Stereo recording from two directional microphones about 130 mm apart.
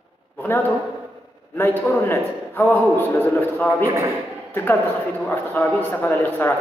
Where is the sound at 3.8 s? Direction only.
20° right (ahead or behind).